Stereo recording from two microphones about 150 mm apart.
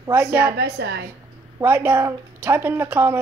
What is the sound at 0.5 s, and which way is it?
Speech, 90° right.